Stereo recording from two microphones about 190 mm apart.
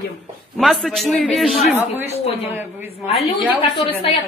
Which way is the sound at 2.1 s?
35° left (ahead or behind).